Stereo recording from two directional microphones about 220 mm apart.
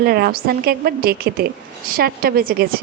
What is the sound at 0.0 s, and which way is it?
A woman's voice, 45° right (ahead or behind).